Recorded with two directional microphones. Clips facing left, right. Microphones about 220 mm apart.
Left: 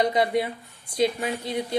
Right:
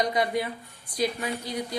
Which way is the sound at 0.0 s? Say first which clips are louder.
Left 3 dB; 25° left (ahead or behind).